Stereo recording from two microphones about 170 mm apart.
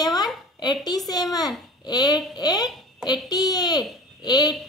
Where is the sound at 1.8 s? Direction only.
20° left (ahead or behind).